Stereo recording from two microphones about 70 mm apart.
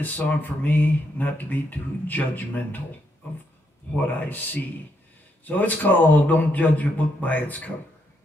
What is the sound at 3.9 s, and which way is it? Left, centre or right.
Speech, left.